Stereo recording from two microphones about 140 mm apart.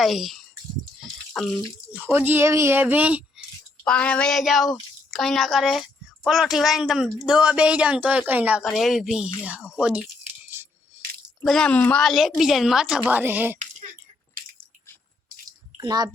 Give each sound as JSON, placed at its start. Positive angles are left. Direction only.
{"t": 0.0, "sound": "speech", "side_deg": 0}
{"t": 2.0, "sound": "speech", "side_deg": -15}
{"t": 3.8, "sound": "a woman's voice", "side_deg": 10}
{"t": 11.4, "sound": "a woman's voice", "side_deg": 5}
{"t": 15.8, "sound": "a child's voice", "side_deg": -30}